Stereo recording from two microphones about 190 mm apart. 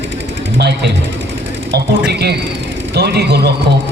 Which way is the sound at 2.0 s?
60° right (ahead or behind).